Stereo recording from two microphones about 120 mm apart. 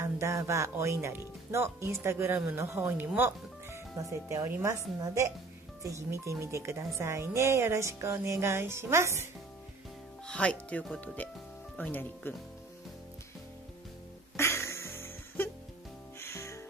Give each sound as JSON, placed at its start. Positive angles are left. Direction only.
{"t": 0.0, "sound": "speech", "side_deg": -25}
{"t": 3.2, "sound": "music", "side_deg": -20}
{"t": 4.3, "sound": "speech", "side_deg": -25}
{"t": 10.2, "sound": "speech", "side_deg": 10}
{"t": 14.3, "sound": "music", "side_deg": 25}